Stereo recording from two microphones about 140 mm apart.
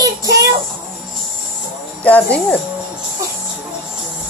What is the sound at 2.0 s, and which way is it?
Speech, 10° left (ahead or behind).